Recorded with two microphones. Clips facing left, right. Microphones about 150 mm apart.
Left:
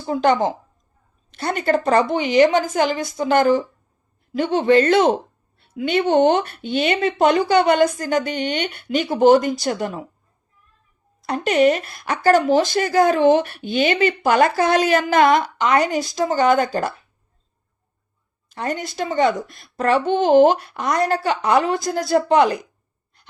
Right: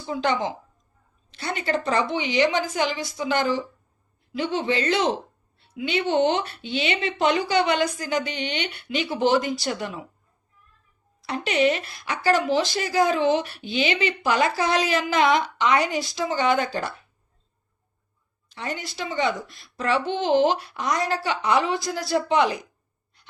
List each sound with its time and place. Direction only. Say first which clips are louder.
0.0 s a woman's voice: left 7 dB; 50° left (ahead or behind)
11.2 s a woman's voice: left 6 dB; 45° left (ahead or behind)
18.4 s a woman's voice: left 6 dB; 50° left (ahead or behind)